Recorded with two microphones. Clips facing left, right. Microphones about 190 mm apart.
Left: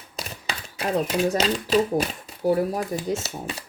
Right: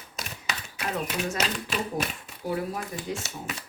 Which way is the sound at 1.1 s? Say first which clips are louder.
Left 7 dB; 35° left (ahead or behind).